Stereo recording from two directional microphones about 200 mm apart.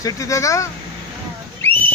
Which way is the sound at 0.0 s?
15° left (ahead or behind).